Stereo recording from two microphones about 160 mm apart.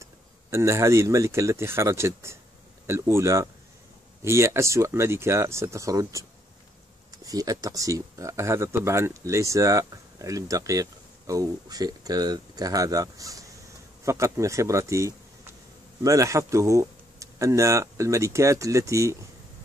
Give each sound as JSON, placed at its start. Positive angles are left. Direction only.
{"t": 0.0, "sound": "speech", "side_deg": -15}
{"t": 7.2, "sound": "speech", "side_deg": -25}